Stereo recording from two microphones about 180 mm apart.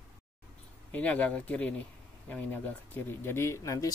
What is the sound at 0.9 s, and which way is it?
Speech, 10° left (ahead or behind).